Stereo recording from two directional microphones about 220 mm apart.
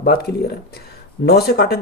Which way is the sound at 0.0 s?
45° left (ahead or behind).